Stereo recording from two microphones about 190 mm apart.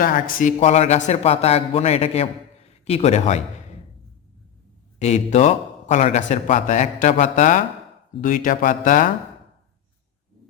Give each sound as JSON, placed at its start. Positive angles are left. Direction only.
{"t": 0.0, "sound": "a man's voice", "side_deg": 45}
{"t": 4.9, "sound": "a man's voice", "side_deg": 35}